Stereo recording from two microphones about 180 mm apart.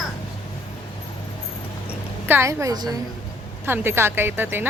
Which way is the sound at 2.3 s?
15° right (ahead or behind).